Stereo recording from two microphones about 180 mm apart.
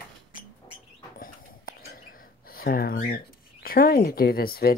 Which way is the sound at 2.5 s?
55° left (ahead or behind).